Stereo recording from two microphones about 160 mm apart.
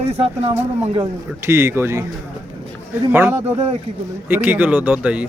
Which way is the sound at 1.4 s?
15° right (ahead or behind).